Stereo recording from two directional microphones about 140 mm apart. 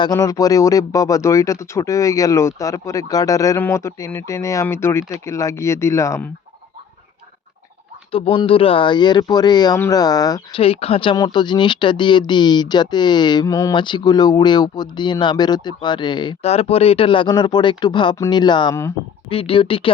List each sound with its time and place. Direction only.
0.0 s speech: 25° left (ahead or behind)
8.1 s speech: 40° left (ahead or behind)
10.5 s speech: 45° left (ahead or behind)
16.4 s speech: 45° left (ahead or behind)